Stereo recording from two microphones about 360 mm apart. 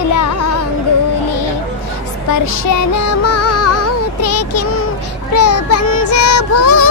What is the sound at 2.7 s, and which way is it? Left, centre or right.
Music, left.